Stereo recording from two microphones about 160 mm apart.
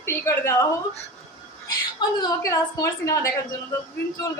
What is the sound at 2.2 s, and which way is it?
Speech, 20° left (ahead or behind).